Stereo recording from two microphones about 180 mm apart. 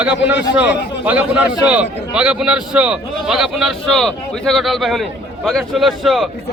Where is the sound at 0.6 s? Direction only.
10° right (ahead or behind).